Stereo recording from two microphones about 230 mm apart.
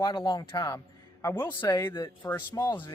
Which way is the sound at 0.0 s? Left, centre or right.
Centre.